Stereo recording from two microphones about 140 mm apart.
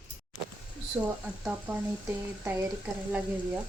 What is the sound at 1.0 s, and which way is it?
Speech, 20° right (ahead or behind).